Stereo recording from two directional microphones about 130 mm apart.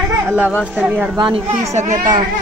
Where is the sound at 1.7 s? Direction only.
75° right (ahead or behind).